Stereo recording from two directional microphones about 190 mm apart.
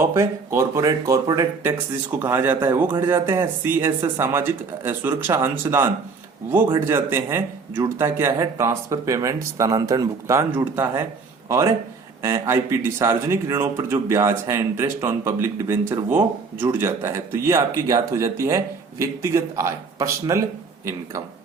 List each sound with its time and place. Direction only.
0.0 s speech: 15° right (ahead or behind)